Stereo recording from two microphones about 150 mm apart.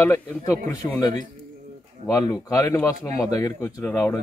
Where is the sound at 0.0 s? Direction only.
15° left (ahead or behind).